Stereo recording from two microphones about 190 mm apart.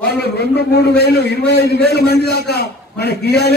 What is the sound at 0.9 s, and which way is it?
A man's voice, 60° left (ahead or behind).